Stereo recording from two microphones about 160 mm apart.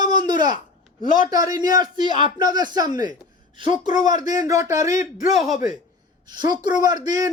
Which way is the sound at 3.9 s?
50° left (ahead or behind).